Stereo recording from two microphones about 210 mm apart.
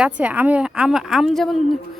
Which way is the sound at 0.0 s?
5° right (ahead or behind).